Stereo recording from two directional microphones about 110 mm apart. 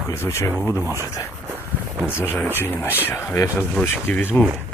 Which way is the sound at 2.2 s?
20° left (ahead or behind).